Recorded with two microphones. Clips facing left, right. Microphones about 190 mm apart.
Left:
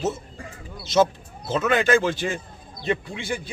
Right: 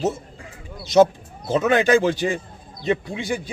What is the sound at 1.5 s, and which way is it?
A man's voice, 15° right (ahead or behind).